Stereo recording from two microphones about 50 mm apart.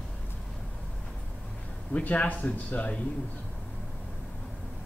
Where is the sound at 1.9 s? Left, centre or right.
Left.